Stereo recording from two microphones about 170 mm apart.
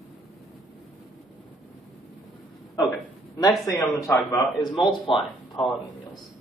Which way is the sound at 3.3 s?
20° left (ahead or behind).